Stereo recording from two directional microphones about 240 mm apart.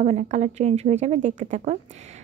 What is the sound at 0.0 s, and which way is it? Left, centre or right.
Speech, right.